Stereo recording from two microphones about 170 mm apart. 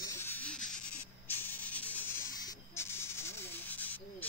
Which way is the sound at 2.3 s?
20° left (ahead or behind).